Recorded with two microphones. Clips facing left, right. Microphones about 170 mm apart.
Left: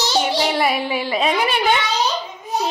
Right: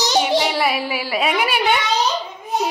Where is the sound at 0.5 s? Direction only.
Centre (ahead or behind).